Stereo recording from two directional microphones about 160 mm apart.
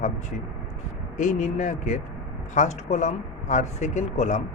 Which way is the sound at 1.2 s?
50° left (ahead or behind).